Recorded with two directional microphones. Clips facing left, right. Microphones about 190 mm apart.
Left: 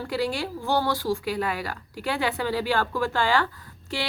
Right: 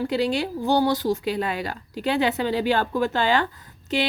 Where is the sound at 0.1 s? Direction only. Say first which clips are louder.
Right 4 dB; 20° right (ahead or behind).